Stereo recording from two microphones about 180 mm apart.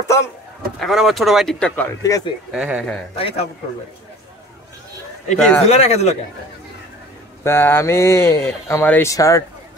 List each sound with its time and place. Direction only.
0.7 s speech: centre (ahead or behind)
2.0 s speech: 20° left (ahead or behind)
2.5 s speech: 5° right (ahead or behind)
3.2 s a man's voice: 30° left (ahead or behind)
5.3 s speech: 5° left (ahead or behind)
5.7 s a man's voice: 35° left (ahead or behind)
7.4 s speech: 10° left (ahead or behind)